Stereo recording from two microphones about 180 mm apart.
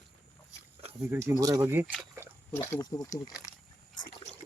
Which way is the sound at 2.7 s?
20° left (ahead or behind).